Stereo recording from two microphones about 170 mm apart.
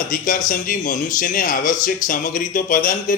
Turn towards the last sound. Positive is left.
turn(degrees=55)  # may be behind; listen again after turning